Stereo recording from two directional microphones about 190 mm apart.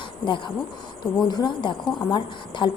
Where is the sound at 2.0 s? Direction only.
25° left (ahead or behind).